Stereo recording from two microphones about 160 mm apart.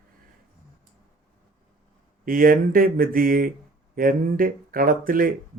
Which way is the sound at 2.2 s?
60° right (ahead or behind).